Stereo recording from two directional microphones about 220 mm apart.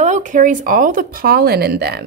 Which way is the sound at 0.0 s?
35° right (ahead or behind).